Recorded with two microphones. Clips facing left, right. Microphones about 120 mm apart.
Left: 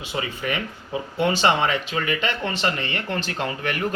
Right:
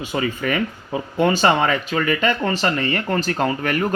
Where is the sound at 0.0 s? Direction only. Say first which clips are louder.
Right 5 dB; 45° right (ahead or behind).